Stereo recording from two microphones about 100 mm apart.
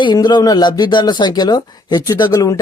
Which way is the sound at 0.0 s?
45° left (ahead or behind).